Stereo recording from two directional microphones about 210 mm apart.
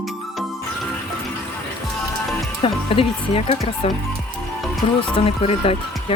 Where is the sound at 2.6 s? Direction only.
25° left (ahead or behind).